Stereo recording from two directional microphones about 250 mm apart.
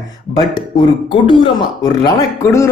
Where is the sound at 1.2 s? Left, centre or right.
Centre.